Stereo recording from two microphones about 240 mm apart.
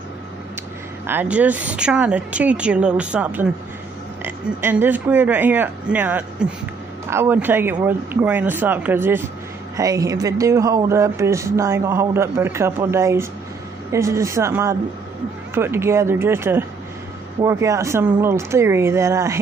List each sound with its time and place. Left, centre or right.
1.0 s speech: centre